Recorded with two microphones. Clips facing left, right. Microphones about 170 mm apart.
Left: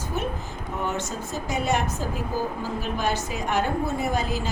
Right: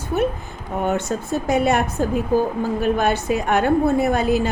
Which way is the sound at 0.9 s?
60° right (ahead or behind).